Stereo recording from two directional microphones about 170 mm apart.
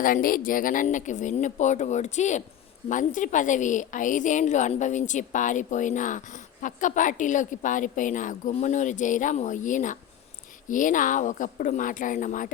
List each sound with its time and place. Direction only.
0.0 s a woman's voice: 55° left (ahead or behind)